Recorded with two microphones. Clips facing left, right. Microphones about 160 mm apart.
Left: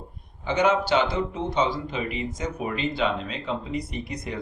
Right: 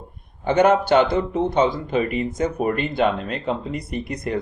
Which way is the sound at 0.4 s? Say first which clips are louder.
Right 6 dB; 55° right (ahead or behind).